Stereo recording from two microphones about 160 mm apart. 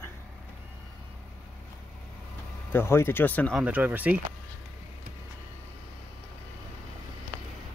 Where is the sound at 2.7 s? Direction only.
15° left (ahead or behind).